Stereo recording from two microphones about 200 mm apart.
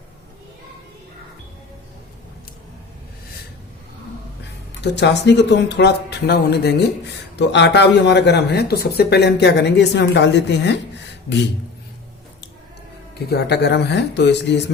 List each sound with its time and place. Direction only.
4.8 s speech: 60° left (ahead or behind)
13.1 s speech: 55° left (ahead or behind)